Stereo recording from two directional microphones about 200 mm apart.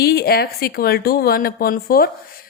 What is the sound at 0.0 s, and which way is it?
A woman's voice, 50° left (ahead or behind).